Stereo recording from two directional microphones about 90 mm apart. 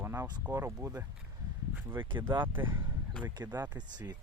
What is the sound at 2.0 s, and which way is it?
Speech, 60° right (ahead or behind).